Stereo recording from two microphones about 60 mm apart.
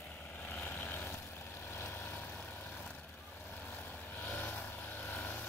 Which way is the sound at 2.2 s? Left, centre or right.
Left.